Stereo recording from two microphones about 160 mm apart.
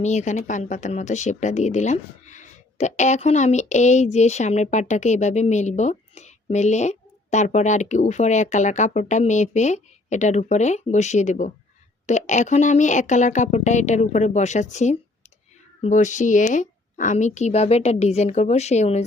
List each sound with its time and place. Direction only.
0.0 s speech: 45° left (ahead or behind)